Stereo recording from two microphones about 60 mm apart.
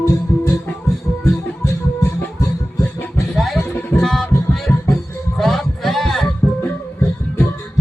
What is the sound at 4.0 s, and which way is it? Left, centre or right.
Music, centre.